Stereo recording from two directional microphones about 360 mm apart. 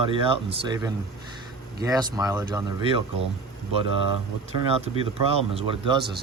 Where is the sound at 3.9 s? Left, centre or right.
Left.